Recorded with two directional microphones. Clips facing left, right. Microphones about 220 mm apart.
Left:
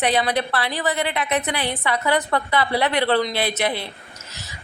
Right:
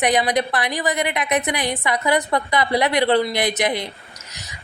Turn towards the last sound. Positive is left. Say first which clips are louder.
# right 2 dB
turn(degrees=-15)  # may be behind; listen again after turning